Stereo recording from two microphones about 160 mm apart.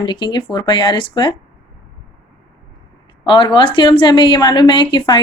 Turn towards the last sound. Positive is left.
turn(degrees=30)  # may be behind; listen again after turning